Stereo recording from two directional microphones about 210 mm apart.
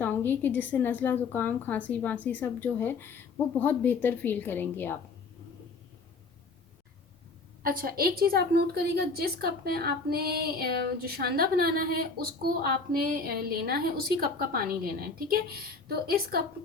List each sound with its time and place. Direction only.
0.0 s speech: 10° left (ahead or behind)
7.6 s a woman's voice: 45° right (ahead or behind)